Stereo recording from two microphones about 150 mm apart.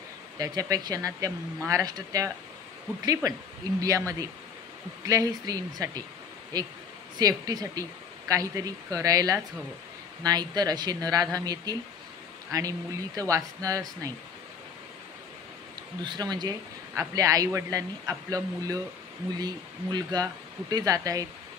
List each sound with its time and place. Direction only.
0.4 s a man's voice: 25° right (ahead or behind)
3.8 s a man's voice: 20° right (ahead or behind)
16.0 s a man's voice: 30° right (ahead or behind)